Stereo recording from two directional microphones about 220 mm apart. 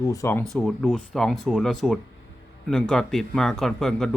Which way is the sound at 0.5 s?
Centre (ahead or behind).